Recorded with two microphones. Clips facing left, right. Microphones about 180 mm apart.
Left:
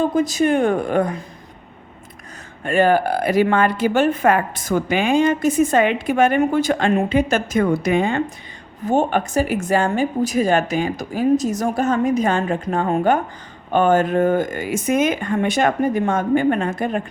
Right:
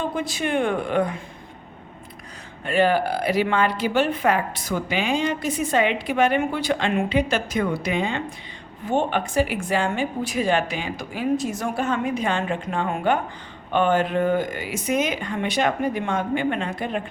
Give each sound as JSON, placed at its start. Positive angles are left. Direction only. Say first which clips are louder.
{"t": 0.0, "sound": "a woman's voice", "louder": "left 8 dB", "side_deg": 40}
{"t": 2.6, "sound": "a woman's voice", "louder": "left 4 dB", "side_deg": 45}